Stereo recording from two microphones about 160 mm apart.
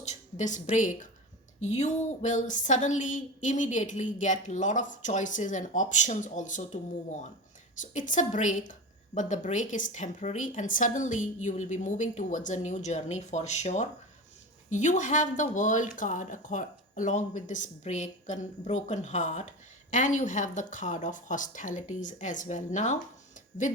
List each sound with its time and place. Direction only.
0.0 s a woman's voice: 45° left (ahead or behind)
7.8 s speech: 55° left (ahead or behind)